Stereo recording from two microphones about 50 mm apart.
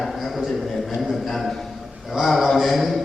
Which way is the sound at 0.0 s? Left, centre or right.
Centre.